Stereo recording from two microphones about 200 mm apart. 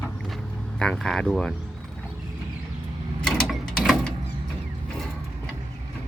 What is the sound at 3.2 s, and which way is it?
Mechanisms, centre (ahead or behind).